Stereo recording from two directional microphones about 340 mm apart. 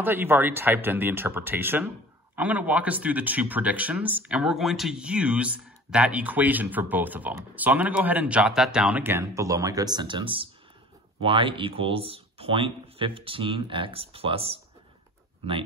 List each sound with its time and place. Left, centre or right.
0.0 s speech: centre